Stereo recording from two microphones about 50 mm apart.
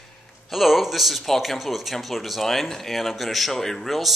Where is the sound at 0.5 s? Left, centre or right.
Centre.